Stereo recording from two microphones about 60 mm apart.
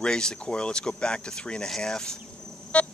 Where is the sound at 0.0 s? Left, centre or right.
Centre.